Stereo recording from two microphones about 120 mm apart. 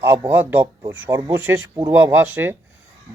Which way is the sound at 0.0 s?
20° right (ahead or behind).